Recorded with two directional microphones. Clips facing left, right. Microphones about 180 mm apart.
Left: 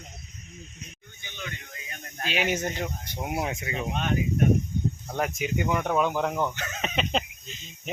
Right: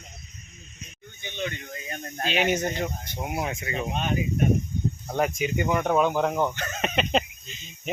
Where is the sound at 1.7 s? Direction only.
40° right (ahead or behind).